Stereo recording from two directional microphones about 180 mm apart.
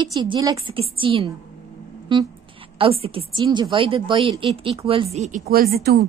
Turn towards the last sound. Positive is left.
turn(degrees=-60)  # may be behind; listen again after turning